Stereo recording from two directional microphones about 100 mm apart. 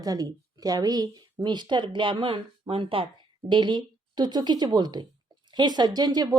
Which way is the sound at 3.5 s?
50° right (ahead or behind).